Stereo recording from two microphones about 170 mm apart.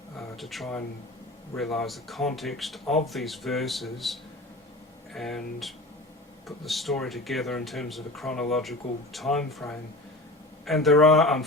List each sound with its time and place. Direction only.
0.3 s speech: centre (ahead or behind)